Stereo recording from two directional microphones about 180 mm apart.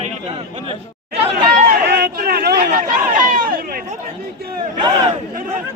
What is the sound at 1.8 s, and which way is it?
Speech, 65° right (ahead or behind).